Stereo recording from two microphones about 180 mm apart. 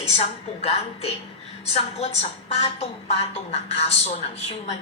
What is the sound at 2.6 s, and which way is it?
A woman's voice, 35° left (ahead or behind).